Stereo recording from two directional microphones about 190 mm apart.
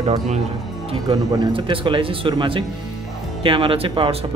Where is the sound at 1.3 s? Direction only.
25° right (ahead or behind).